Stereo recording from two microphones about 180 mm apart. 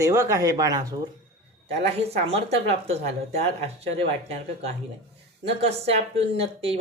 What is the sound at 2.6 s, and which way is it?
Speech, 35° right (ahead or behind).